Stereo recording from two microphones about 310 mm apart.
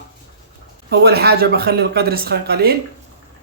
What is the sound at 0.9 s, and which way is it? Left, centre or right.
Speech, right.